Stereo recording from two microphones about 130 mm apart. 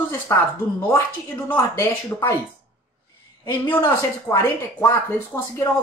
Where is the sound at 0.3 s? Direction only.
20° left (ahead or behind).